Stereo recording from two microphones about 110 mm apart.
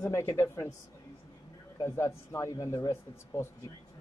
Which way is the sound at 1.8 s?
25° left (ahead or behind).